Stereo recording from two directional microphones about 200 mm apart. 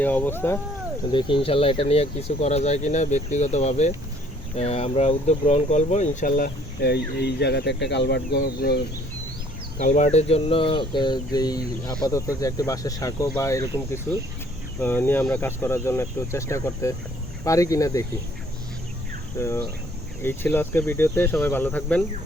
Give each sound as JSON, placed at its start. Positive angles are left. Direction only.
{"t": 0.0, "sound": "speech", "side_deg": 10}
{"t": 1.1, "sound": "speech", "side_deg": 25}
{"t": 9.7, "sound": "speech", "side_deg": 35}
{"t": 14.8, "sound": "speech", "side_deg": 10}
{"t": 19.4, "sound": "speech", "side_deg": 15}